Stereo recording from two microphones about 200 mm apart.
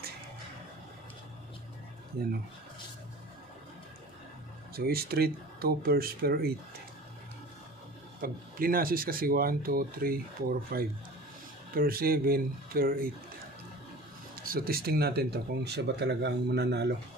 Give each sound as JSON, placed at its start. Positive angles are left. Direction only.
{"t": 4.7, "sound": "speech", "side_deg": -50}
{"t": 8.2, "sound": "speech", "side_deg": -45}
{"t": 14.4, "sound": "speech", "side_deg": -50}